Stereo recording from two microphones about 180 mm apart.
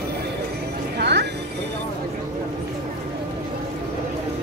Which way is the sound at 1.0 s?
65° right (ahead or behind).